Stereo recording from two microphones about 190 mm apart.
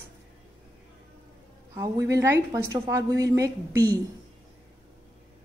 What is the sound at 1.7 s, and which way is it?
A woman's voice, 15° right (ahead or behind).